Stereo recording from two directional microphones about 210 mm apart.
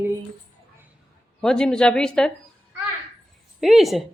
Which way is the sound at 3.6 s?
Centre (ahead or behind).